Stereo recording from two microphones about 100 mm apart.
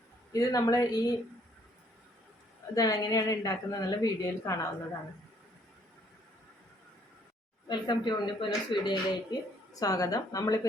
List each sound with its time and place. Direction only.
0.3 s a woman's voice: 35° left (ahead or behind)
2.7 s a woman's voice: 35° left (ahead or behind)
7.7 s speech: 50° left (ahead or behind)
9.8 s a woman's voice: 35° left (ahead or behind)